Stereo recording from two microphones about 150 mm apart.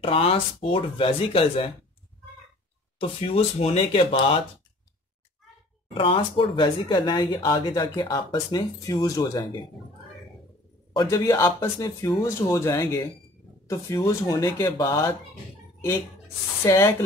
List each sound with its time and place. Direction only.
0.0 s speech: 40° left (ahead or behind)
3.0 s speech: 40° left (ahead or behind)
5.9 s speech: 35° left (ahead or behind)
11.1 s speech: 20° left (ahead or behind)
16.6 s speech: 20° left (ahead or behind)